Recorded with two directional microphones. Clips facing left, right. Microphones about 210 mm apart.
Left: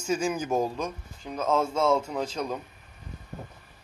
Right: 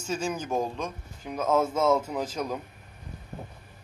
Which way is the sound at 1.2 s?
10° right (ahead or behind).